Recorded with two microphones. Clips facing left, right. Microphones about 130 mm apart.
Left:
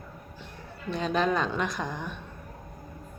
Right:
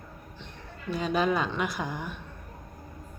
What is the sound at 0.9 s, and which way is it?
A man's voice, 5° right (ahead or behind).